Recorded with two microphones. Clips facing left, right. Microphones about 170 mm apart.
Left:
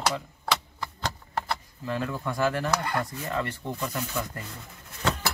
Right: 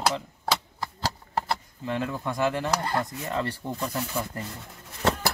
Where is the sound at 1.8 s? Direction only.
20° right (ahead or behind).